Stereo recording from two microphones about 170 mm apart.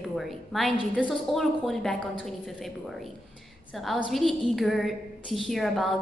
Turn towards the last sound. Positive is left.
turn(degrees=0)  # may be behind; listen again after turning